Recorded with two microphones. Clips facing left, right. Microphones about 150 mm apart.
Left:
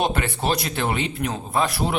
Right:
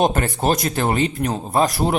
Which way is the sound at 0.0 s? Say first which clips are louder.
Right 5 dB; 45° right (ahead or behind).